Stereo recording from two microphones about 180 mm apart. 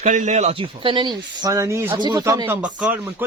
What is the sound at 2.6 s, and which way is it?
Speech, 5° right (ahead or behind).